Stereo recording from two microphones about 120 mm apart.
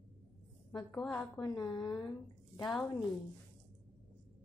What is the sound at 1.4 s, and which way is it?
Speech, 35° left (ahead or behind).